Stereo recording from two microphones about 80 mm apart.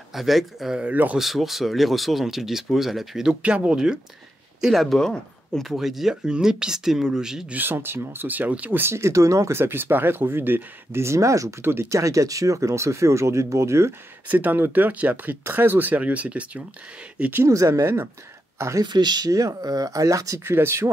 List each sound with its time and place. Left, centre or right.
0.1 s speech: centre
0.7 s speech: centre
1.1 s speech: centre
7.5 s speech: right
14.2 s speech: right
17.5 s speech: right
18.8 s speech: right
20.4 s speech: right